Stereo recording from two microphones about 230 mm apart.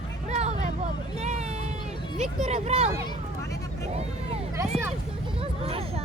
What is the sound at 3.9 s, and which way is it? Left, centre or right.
Speech, right.